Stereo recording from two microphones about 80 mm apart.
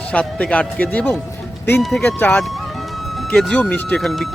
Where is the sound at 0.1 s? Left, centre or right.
Centre.